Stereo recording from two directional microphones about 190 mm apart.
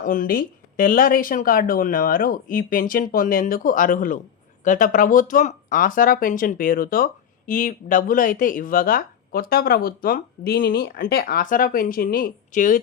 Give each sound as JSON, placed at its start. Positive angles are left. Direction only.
{"t": 0.0, "sound": "speech", "side_deg": 45}